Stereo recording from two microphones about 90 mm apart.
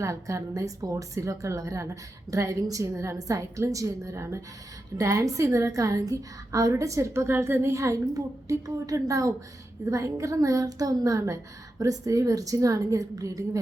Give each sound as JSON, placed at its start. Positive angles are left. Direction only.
{"t": 0.0, "sound": "a woman's voice", "side_deg": -35}